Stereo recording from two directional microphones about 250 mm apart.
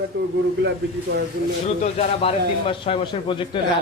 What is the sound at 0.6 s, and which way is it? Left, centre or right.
Speech, right.